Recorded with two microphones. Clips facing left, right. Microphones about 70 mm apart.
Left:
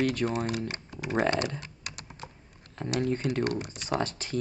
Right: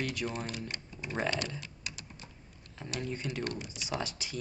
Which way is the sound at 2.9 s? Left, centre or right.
Left.